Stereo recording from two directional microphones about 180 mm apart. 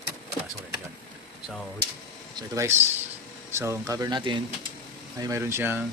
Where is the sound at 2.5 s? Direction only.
15° right (ahead or behind).